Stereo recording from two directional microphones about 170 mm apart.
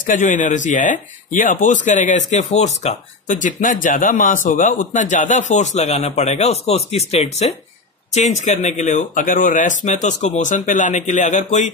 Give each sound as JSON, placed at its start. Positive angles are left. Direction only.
{"t": 0.0, "sound": "speech", "side_deg": 50}